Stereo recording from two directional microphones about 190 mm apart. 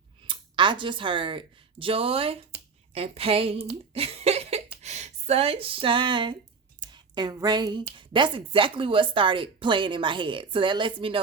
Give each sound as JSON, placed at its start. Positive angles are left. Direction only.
{"t": 0.3, "sound": "speech", "side_deg": -25}
{"t": 3.9, "sound": "a sound", "side_deg": -30}
{"t": 6.9, "sound": "speech", "side_deg": -20}